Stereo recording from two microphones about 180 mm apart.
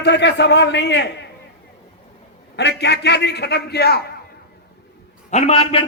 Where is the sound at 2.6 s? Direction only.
70° left (ahead or behind).